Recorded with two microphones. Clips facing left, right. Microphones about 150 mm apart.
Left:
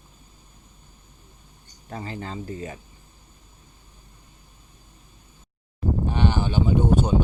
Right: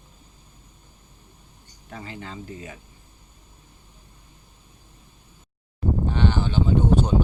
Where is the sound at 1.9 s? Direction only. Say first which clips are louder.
Left 4 dB; 35° left (ahead or behind).